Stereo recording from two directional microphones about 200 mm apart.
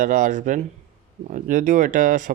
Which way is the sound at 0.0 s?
40° right (ahead or behind).